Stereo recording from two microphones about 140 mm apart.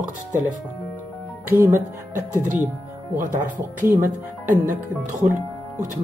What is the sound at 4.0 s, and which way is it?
Speech, 70° right (ahead or behind).